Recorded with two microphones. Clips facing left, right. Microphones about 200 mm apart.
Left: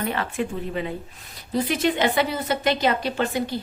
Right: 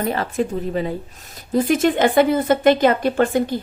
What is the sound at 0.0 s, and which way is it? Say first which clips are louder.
A woman's voice: right 5 dB; 40° right (ahead or behind).